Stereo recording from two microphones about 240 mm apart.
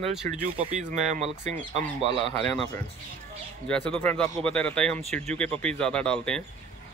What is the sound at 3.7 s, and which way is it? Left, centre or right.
Speech, centre.